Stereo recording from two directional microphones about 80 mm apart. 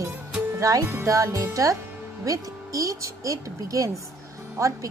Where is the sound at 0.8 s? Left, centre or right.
Right.